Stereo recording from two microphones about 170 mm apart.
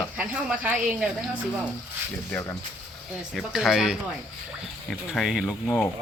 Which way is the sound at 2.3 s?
10° left (ahead or behind).